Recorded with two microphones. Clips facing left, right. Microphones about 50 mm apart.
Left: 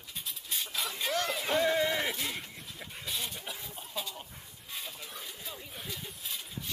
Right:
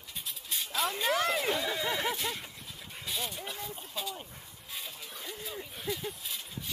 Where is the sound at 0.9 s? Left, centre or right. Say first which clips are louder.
Right 3 dB; centre.